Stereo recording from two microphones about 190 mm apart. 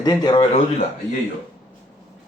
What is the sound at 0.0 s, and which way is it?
Speech, 20° left (ahead or behind).